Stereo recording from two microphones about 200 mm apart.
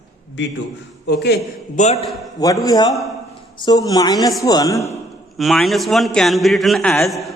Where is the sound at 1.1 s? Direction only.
55° left (ahead or behind).